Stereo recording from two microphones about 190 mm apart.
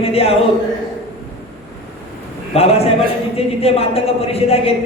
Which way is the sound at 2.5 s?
30° left (ahead or behind).